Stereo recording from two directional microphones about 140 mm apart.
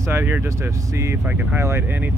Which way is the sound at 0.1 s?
15° right (ahead or behind).